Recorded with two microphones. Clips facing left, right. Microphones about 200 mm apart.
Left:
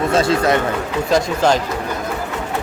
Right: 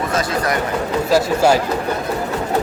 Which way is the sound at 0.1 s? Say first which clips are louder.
Left 6 dB; 25° left (ahead or behind).